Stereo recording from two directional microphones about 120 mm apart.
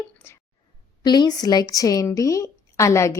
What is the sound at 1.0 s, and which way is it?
Speech, 35° left (ahead or behind).